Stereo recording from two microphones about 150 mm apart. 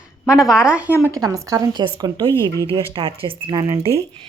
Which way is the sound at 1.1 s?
20° right (ahead or behind).